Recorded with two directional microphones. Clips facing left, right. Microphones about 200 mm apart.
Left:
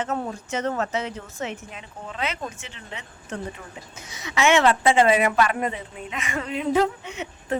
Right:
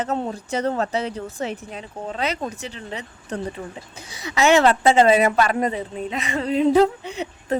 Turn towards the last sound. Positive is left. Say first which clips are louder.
# right 4 dB
turn(degrees=-35)  # may be behind; listen again after turning